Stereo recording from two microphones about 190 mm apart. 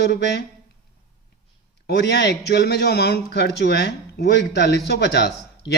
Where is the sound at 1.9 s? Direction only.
60° left (ahead or behind).